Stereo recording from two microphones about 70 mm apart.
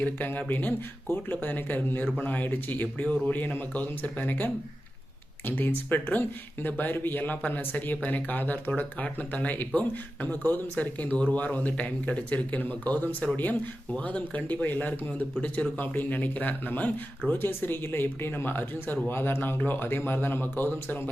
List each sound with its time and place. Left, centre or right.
0.0 s a man's voice: left